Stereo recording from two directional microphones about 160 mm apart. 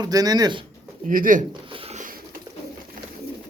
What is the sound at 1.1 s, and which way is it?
Speech, 60° right (ahead or behind).